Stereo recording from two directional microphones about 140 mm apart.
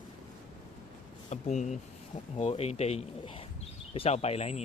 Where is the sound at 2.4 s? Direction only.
50° left (ahead or behind).